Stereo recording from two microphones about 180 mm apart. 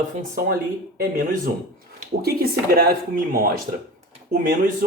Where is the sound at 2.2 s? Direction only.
55° right (ahead or behind).